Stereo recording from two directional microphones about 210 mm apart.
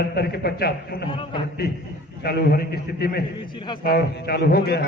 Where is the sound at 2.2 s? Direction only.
50° left (ahead or behind).